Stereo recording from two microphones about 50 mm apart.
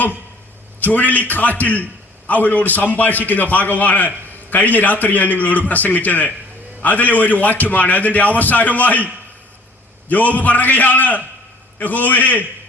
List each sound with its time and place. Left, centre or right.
0.8 s a man's voice: left
10.1 s a man's voice: left